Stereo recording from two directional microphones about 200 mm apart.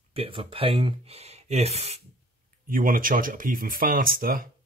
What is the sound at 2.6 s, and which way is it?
Speech, 45° right (ahead or behind).